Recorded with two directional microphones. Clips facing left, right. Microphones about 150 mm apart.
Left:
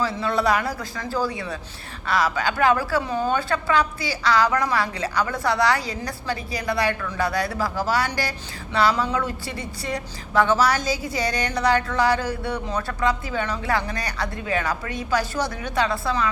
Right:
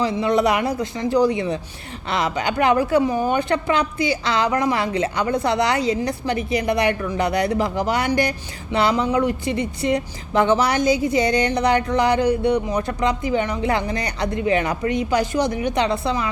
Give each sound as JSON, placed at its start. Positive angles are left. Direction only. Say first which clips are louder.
{"t": 0.0, "sound": "speech", "louder": "right 4 dB", "side_deg": -20}